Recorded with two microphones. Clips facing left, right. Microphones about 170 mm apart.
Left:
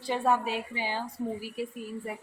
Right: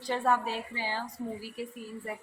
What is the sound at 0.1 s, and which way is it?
A woman's voice, 15° left (ahead or behind).